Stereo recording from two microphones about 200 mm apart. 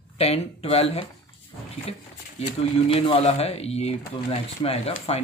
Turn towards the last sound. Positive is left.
turn(degrees=30)  # may be behind; listen again after turning